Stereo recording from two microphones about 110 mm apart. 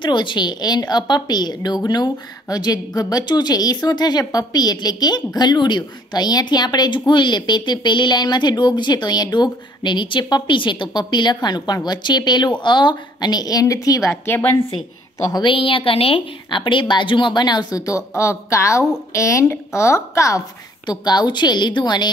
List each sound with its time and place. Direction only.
0.0 s a woman's voice: 45° left (ahead or behind); by 14.6 s 15° left (ahead or behind)
15.4 s a woman's voice: 55° left (ahead or behind); by 20.4 s 30° left (ahead or behind)
20.8 s a woman's voice: 40° left (ahead or behind)